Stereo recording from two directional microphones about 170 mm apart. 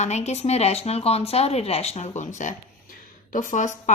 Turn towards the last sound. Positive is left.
turn(degrees=45)  # may be behind; listen again after turning